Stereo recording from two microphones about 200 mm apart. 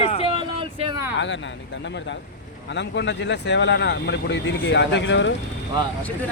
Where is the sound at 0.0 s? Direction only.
30° left (ahead or behind).